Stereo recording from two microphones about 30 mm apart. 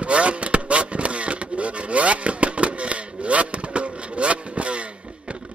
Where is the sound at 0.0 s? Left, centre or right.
Right.